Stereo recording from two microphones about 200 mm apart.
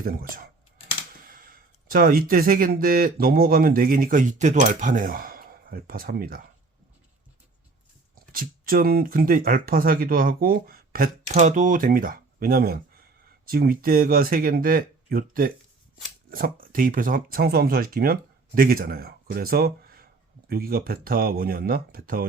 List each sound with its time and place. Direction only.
0.0 s speech: 45° right (ahead or behind)
8.3 s speech: 45° right (ahead or behind)